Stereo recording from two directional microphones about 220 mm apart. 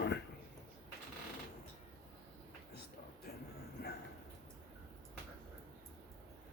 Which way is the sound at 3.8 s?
45° left (ahead or behind).